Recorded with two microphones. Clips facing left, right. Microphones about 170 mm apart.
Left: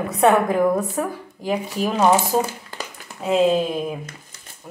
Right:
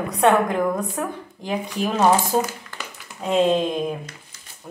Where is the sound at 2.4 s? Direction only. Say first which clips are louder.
Left 1 dB; 30° left (ahead or behind).